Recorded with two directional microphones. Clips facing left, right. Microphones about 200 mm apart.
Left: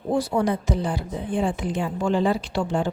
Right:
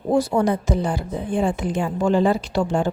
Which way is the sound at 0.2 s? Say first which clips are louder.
Right 3 dB; 45° right (ahead or behind).